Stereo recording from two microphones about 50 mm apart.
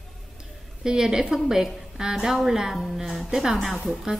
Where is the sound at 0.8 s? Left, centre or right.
Centre.